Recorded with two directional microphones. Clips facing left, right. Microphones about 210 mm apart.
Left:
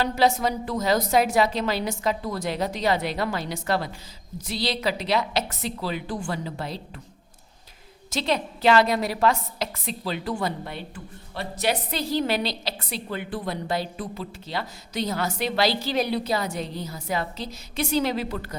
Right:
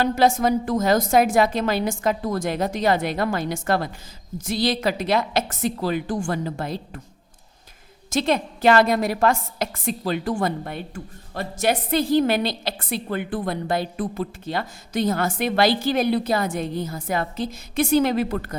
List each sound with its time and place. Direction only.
0.0 s a woman's voice: 50° right (ahead or behind)
8.1 s a woman's voice: 50° right (ahead or behind)